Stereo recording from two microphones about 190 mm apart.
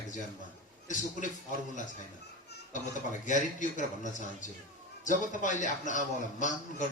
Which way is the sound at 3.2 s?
40° left (ahead or behind).